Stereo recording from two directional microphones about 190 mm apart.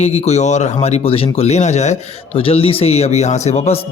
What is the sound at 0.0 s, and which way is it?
Speech, 35° left (ahead or behind).